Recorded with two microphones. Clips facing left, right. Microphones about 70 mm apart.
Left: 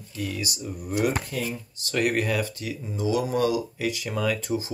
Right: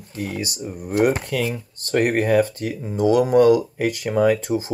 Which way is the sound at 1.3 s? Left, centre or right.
Right.